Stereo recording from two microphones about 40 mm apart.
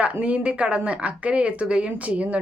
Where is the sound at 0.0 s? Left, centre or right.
Right.